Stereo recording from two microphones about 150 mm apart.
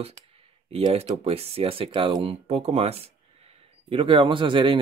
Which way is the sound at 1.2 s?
40° right (ahead or behind).